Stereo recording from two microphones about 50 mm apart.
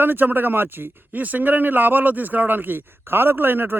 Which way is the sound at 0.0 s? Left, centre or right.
Right.